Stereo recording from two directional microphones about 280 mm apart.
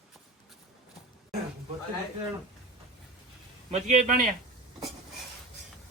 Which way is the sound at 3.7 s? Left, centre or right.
Right.